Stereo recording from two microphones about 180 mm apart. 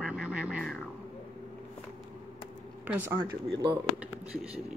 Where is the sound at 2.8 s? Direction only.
10° right (ahead or behind).